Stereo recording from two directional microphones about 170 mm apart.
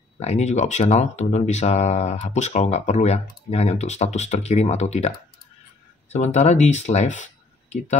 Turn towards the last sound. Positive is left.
turn(degrees=45)  # may be behind; listen again after turning